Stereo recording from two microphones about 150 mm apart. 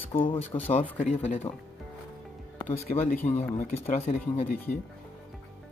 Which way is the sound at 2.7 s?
45° left (ahead or behind).